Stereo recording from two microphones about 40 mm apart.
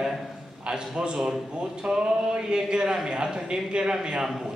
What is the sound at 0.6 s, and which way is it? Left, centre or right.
Speech, right.